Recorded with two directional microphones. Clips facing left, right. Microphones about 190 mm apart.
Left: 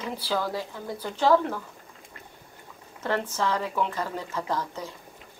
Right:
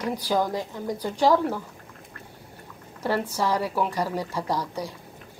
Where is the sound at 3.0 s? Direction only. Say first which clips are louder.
Right 2 dB; 10° right (ahead or behind).